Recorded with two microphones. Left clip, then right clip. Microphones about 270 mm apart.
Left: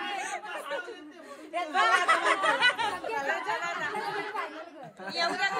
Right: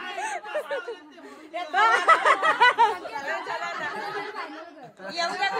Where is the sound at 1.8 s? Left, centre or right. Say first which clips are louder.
Right 5 dB; right.